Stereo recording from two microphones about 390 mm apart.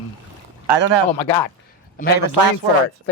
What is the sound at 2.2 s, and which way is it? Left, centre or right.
Speech, right.